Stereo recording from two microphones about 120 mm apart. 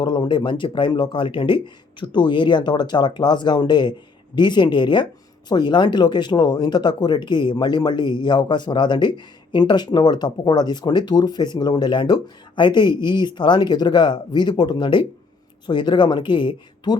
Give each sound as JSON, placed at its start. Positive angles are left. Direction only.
{"t": 0.0, "sound": "speech", "side_deg": 40}